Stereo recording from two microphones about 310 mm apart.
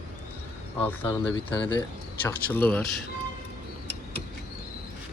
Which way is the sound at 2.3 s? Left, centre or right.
Centre.